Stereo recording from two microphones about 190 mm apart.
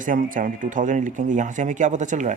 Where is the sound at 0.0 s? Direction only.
45° right (ahead or behind).